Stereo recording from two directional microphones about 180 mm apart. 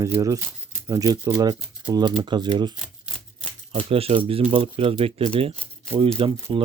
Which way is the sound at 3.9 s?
35° right (ahead or behind).